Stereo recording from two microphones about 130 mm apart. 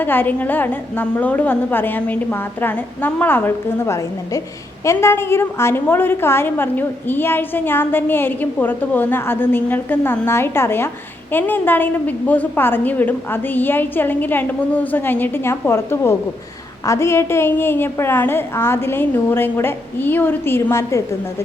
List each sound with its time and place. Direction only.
0.0 s a woman's voice: 15° left (ahead or behind)